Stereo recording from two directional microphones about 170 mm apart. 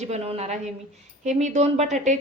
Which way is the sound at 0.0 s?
40° right (ahead or behind).